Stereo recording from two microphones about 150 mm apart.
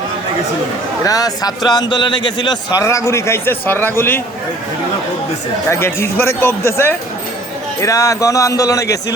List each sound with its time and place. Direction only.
1.0 s a man's voice: 25° left (ahead or behind)
5.6 s speech: 15° left (ahead or behind)
7.8 s a man's voice: 20° left (ahead or behind)